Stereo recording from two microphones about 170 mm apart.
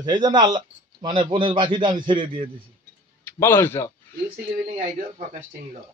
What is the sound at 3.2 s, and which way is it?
Speech, 15° left (ahead or behind).